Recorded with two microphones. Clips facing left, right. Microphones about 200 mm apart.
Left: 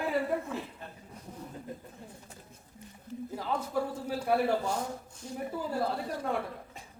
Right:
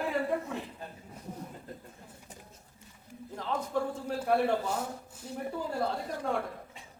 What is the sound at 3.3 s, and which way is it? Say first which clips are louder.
Speech: even; 10° left (ahead or behind).